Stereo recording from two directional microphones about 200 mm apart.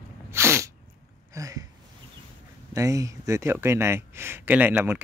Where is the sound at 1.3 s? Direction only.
15° right (ahead or behind).